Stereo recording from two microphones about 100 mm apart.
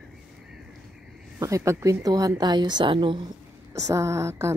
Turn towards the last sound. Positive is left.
turn(degrees=-30)  # may be behind; listen again after turning